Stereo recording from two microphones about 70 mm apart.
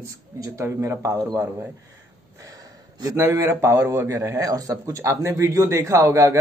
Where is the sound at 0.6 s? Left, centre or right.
Right.